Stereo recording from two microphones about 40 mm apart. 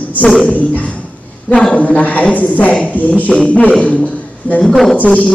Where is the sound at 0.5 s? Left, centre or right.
Left.